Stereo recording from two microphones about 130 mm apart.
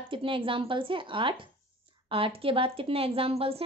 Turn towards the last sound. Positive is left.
turn(degrees=-50)  # may be behind; listen again after turning